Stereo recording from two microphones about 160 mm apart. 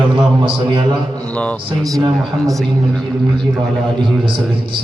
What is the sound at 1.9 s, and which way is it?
Speech, 25° right (ahead or behind).